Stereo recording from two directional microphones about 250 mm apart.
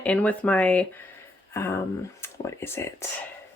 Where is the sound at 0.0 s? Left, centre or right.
Centre.